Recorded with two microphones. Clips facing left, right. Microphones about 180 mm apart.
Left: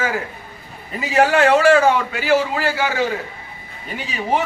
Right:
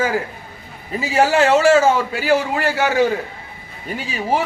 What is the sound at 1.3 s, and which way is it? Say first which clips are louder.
Speech: even; 25° right (ahead or behind).